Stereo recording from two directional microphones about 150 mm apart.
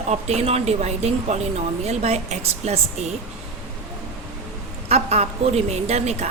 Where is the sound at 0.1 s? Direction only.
45° right (ahead or behind).